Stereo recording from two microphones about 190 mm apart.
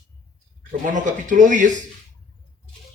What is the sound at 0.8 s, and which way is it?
Speech, 40° right (ahead or behind).